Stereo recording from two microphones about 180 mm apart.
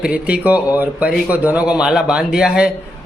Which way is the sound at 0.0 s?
5° right (ahead or behind).